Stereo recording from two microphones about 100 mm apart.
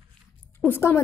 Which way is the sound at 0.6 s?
25° left (ahead or behind).